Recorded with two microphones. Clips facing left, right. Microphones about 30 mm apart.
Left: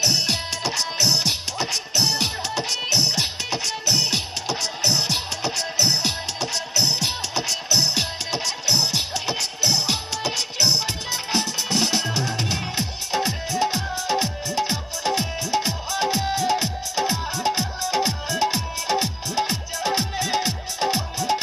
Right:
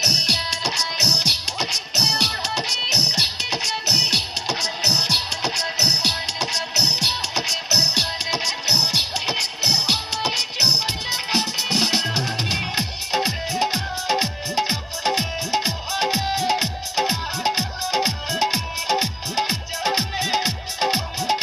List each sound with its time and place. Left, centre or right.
0.0 s music: right